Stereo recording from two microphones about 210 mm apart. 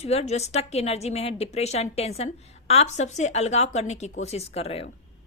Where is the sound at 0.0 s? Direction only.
30° left (ahead or behind).